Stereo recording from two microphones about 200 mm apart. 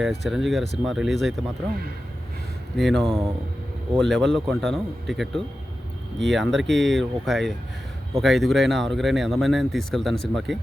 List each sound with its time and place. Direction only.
0.0 s speech: centre (ahead or behind)
2.7 s speech: centre (ahead or behind)